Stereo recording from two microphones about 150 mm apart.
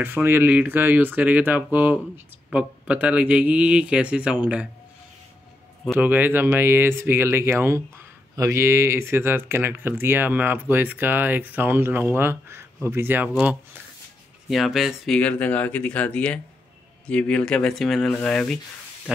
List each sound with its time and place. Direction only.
0.0 s speech: 15° right (ahead or behind)
5.9 s speech: 10° right (ahead or behind)
14.5 s speech: centre (ahead or behind)
19.1 s speech: 5° right (ahead or behind)